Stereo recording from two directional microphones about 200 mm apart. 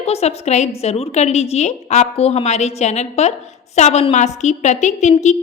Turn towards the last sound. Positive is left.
turn(degrees=35)  # may be behind; listen again after turning